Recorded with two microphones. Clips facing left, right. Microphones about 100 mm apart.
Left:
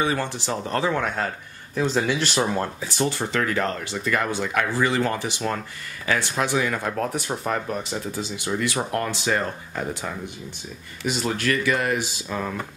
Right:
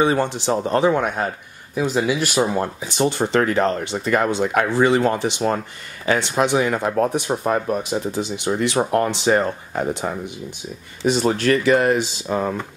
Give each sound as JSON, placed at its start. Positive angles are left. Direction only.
{"t": 0.0, "sound": "speech", "side_deg": -25}
{"t": 8.3, "sound": "speech", "side_deg": -25}